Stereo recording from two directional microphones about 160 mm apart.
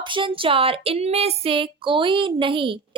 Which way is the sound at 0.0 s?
30° right (ahead or behind).